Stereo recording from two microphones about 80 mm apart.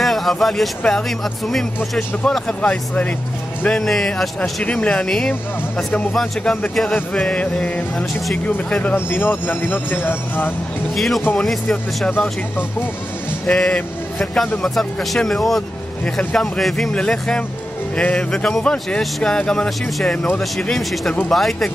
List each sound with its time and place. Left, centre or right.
0.0 s speech: centre
3.6 s speech: centre; by 10.5 s left
11.0 s speech: centre
13.5 s speech: centre
16.0 s speech: centre